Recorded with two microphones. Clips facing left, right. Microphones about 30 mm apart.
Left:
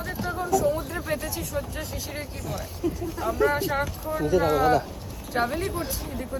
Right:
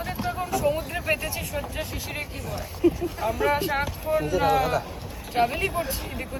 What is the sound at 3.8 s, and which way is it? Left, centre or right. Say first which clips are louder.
Speech: right 2 dB; right.